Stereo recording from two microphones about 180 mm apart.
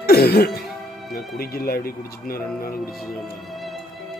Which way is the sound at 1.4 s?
55° left (ahead or behind).